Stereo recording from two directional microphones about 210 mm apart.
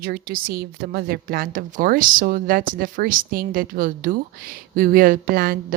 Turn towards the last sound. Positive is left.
turn(degrees=-45)  # may be behind; listen again after turning